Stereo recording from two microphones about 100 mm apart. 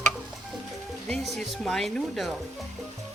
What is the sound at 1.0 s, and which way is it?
Speech, centre (ahead or behind).